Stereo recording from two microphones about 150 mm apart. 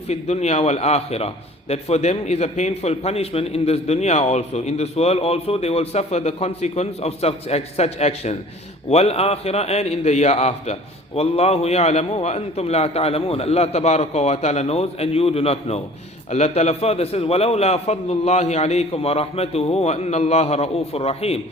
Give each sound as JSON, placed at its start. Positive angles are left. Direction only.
{"t": 0.1, "sound": "a man's voice", "side_deg": 45}